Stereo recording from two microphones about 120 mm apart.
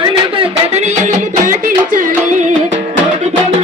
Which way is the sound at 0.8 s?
90° right.